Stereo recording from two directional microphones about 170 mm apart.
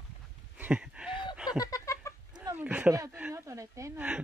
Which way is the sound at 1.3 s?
5° right (ahead or behind).